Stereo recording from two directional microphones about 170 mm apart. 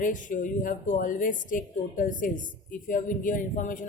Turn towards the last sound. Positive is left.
turn(degrees=50)  # may be behind; listen again after turning